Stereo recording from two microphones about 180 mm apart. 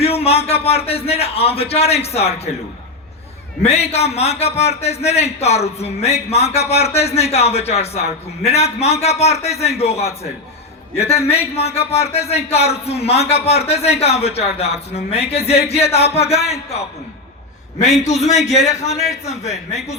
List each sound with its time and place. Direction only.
0.0 s a man's voice: 35° left (ahead or behind)
3.6 s a man's voice: 35° left (ahead or behind)